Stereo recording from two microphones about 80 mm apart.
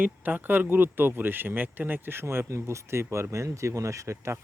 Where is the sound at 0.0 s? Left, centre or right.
Right.